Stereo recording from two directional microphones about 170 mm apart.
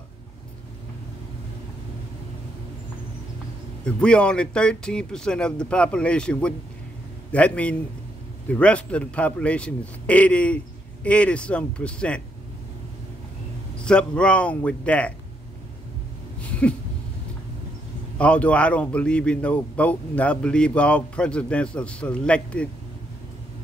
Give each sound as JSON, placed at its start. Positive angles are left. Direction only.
{"t": 3.8, "sound": "a man's voice", "side_deg": 5}
{"t": 13.8, "sound": "a man's voice", "side_deg": 5}
{"t": 16.3, "sound": "a sound", "side_deg": 10}
{"t": 18.1, "sound": "a man's voice", "side_deg": 5}